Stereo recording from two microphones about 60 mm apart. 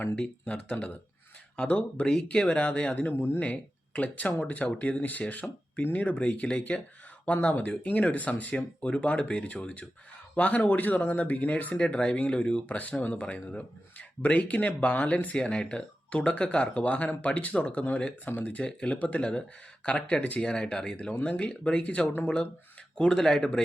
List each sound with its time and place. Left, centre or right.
0.2 s speech: centre; by 3.4 s left
3.4 s speech: left
11.8 s speech: centre
15.4 s speech: centre